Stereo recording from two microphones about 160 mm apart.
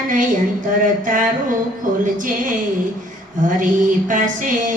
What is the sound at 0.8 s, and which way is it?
Speech, 55° right (ahead or behind).